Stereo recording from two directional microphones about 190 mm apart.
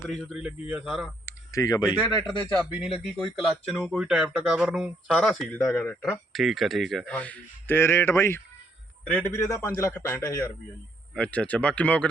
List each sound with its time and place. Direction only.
0.1 s speech: 5° right (ahead or behind)
1.2 s a sound: 20° left (ahead or behind)
2.6 s speech: 10° right (ahead or behind)
5.5 s speech: 15° left (ahead or behind)
6.3 s speech: centre (ahead or behind)